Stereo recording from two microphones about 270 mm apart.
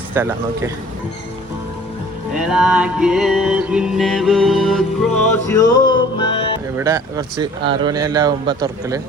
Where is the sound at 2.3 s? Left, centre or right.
Centre.